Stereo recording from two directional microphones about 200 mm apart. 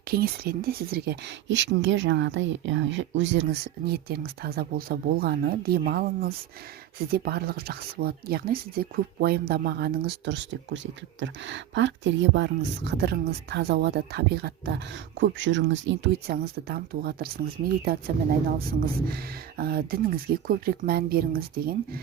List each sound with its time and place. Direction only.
0.1 s speech: 50° right (ahead or behind); by 3.4 s 65° right (ahead or behind)
3.8 s speech: 50° right (ahead or behind)
15.2 s speech: 65° right (ahead or behind); by 17.9 s 50° right (ahead or behind)
19.1 s speech: 50° right (ahead or behind)